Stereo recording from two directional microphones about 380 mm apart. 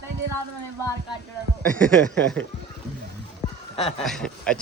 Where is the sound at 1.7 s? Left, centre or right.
Centre.